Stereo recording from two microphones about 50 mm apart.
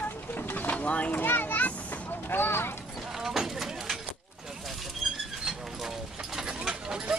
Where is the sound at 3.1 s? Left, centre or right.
Centre.